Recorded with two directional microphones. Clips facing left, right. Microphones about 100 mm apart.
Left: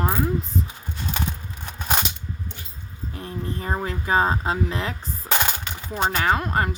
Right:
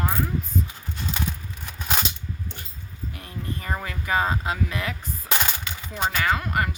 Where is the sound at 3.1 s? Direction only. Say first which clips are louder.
Left 5 dB; 30° left (ahead or behind).